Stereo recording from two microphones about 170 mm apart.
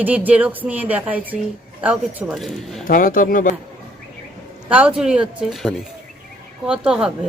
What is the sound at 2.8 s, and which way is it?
Speech, 55° left (ahead or behind).